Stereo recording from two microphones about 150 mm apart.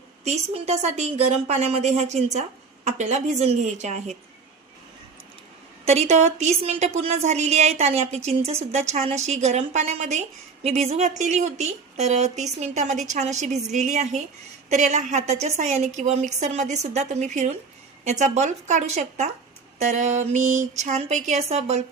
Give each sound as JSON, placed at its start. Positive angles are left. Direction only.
{"t": 0.3, "sound": "a woman's voice", "side_deg": -45}
{"t": 5.8, "sound": "a woman's voice", "side_deg": -45}